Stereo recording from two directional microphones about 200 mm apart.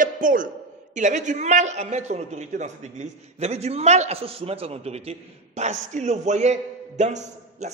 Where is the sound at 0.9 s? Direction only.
35° right (ahead or behind).